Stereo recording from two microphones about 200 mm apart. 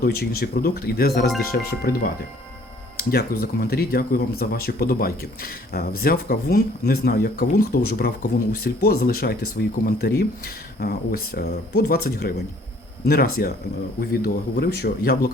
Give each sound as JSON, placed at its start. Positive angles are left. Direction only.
{"t": 0.0, "sound": "speech", "side_deg": 50}